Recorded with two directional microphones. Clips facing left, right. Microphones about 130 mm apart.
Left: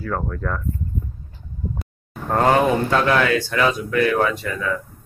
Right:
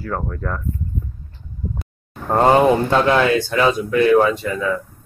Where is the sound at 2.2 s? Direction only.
20° right (ahead or behind).